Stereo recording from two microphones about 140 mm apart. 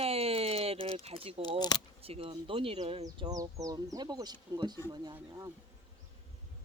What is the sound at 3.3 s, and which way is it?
Speech, 25° right (ahead or behind).